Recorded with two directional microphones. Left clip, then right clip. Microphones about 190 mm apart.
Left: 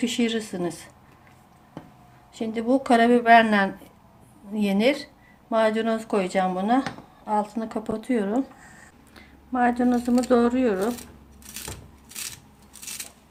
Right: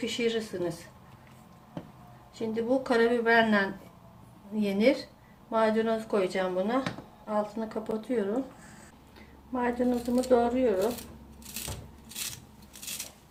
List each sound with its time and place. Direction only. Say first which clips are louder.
0.0 s a woman's voice: left 3 dB; 55° left (ahead or behind)
2.3 s a woman's voice: left 4 dB; 55° left (ahead or behind)
9.6 s a woman's voice: left 7 dB; 60° left (ahead or behind)